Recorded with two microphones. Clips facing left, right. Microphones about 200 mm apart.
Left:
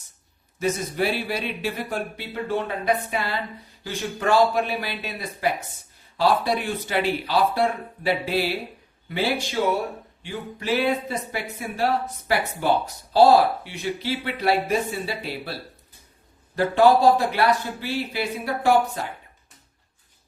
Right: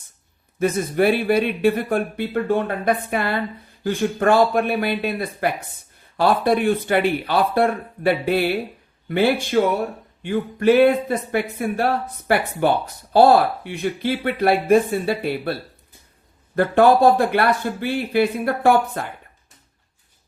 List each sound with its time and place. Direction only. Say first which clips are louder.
0.6 s speech: right 6 dB; 55° right (ahead or behind)
16.6 s speech: right 3 dB; 55° right (ahead or behind)